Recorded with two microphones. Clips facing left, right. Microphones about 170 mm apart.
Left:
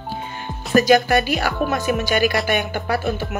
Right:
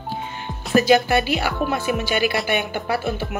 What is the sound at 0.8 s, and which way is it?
Speech, 20° right (ahead or behind).